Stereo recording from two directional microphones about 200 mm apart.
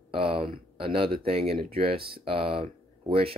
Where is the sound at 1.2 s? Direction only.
30° right (ahead or behind).